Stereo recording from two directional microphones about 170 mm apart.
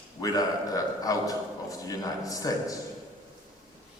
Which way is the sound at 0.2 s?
20° left (ahead or behind).